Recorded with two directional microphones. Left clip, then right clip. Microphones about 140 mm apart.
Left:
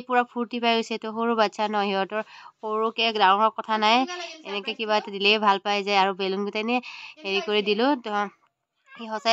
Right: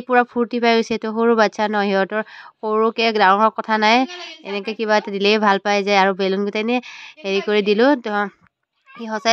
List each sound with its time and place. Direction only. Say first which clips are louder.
0.1 s speech: right 7 dB; 25° right (ahead or behind)